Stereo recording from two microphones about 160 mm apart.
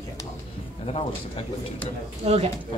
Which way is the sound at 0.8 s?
40° left (ahead or behind).